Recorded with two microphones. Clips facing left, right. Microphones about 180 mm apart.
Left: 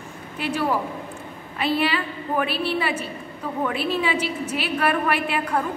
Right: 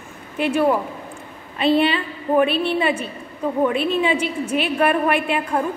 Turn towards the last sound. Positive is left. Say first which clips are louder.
# right 3 dB
turn(degrees=-20)  # may be behind; listen again after turning